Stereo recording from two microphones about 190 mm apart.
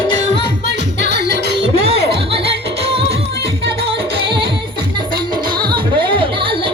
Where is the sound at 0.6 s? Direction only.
65° right (ahead or behind).